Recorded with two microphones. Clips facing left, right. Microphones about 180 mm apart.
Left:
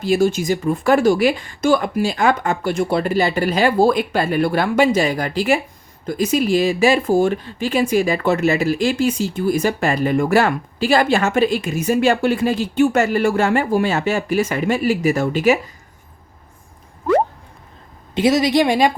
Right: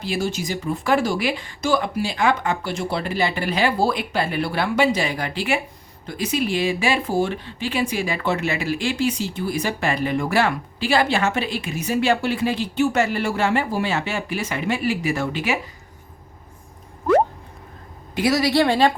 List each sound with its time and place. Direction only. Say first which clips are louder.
0.0 s speech: left 8 dB; 45° left (ahead or behind)
18.1 s a woman's voice: left 4 dB; 20° left (ahead or behind)